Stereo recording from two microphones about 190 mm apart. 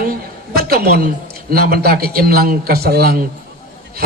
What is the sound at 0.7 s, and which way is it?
A woman's voice, 55° right (ahead or behind).